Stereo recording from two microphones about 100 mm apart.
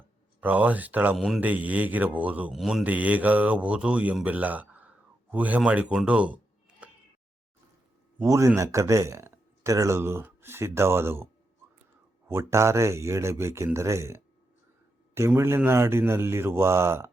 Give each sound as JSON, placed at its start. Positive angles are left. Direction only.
{"t": 0.3, "sound": "speech", "side_deg": -15}
{"t": 1.1, "sound": "speech", "side_deg": 0}
{"t": 1.4, "sound": "speech", "side_deg": -15}
{"t": 2.5, "sound": "speech", "side_deg": -5}
{"t": 2.8, "sound": "speech", "side_deg": -15}
{"t": 6.1, "sound": "a sound", "side_deg": -15}
{"t": 8.2, "sound": "speech", "side_deg": -30}
{"t": 12.3, "sound": "speech", "side_deg": -30}
{"t": 15.4, "sound": "speech", "side_deg": -25}